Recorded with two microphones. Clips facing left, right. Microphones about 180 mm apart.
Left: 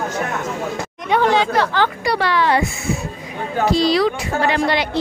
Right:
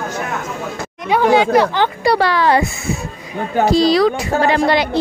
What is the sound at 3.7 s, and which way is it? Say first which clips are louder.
Speech: right 3 dB; 35° right (ahead or behind).